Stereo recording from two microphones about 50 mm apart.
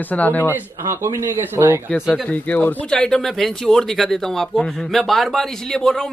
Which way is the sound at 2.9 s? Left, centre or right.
Centre.